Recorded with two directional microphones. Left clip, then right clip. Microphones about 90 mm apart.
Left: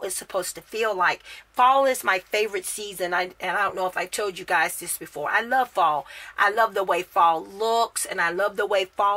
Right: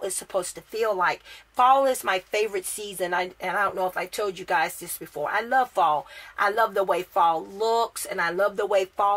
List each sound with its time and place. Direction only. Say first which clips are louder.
0.7 s speech: left 1 dB; 20° left (ahead or behind)
1.6 s a woman's voice: left 1 dB; 35° left (ahead or behind)